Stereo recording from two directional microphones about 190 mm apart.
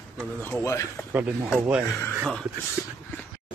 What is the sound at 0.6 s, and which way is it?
Speech, 15° left (ahead or behind).